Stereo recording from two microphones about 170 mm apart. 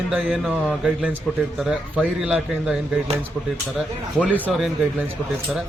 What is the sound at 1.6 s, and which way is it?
A man's voice, 5° right (ahead or behind).